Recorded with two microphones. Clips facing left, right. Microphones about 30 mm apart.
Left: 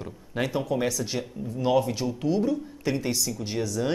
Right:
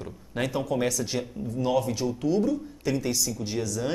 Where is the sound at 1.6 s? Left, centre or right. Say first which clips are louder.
Left 2 dB; centre.